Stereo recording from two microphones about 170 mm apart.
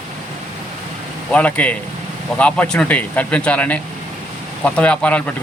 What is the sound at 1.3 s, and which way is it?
Speech, 10° left (ahead or behind).